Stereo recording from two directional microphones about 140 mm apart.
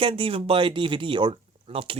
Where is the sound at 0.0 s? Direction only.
40° right (ahead or behind).